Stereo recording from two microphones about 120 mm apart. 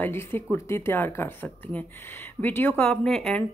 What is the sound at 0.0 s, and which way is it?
Speech, 20° left (ahead or behind).